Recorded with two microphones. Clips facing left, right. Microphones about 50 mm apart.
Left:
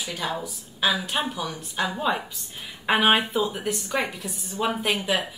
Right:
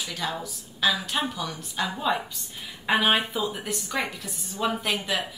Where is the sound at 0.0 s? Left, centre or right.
Centre.